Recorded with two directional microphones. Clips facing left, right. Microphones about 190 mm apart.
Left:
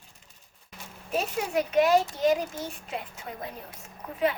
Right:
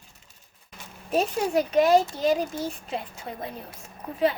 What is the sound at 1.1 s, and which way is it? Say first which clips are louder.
A woman's voice: right 4 dB; 35° right (ahead or behind).